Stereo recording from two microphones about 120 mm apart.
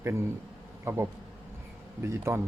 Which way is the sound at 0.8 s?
20° right (ahead or behind).